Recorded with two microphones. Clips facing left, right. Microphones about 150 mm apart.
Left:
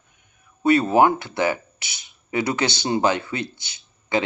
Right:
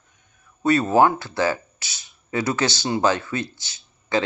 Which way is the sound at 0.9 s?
20° left (ahead or behind).